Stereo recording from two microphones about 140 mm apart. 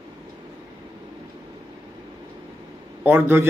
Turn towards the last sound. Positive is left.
turn(degrees=-15)  # may be behind; listen again after turning